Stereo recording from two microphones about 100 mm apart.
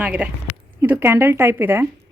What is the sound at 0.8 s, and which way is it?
Speech, 25° right (ahead or behind).